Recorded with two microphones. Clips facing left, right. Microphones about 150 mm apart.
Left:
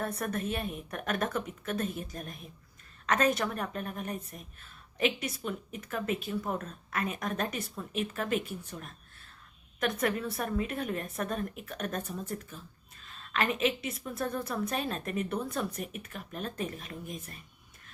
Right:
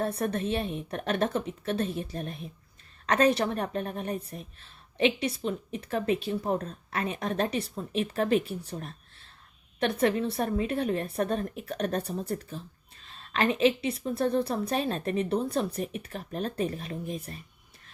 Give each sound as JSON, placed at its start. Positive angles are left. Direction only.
{"t": 0.0, "sound": "a woman's voice", "side_deg": -30}